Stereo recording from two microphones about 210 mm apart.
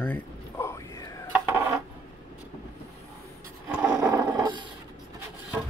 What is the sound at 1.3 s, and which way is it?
Dishes, 10° right (ahead or behind).